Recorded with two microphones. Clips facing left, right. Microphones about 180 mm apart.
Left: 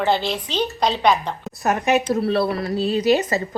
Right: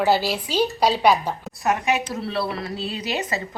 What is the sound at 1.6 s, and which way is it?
Speech, 45° left (ahead or behind).